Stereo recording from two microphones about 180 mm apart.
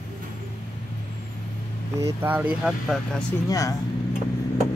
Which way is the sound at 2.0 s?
10° right (ahead or behind).